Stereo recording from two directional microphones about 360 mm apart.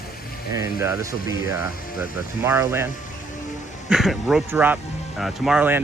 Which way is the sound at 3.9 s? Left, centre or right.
Centre.